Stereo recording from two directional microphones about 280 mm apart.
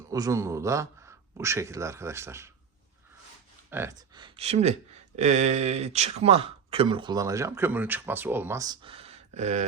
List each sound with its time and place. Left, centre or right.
0.1 s a man's voice: centre
3.7 s a man's voice: centre; by 9.6 s right